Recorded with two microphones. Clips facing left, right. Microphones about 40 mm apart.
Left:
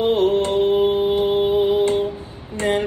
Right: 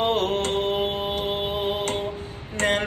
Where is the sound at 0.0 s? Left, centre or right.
Right.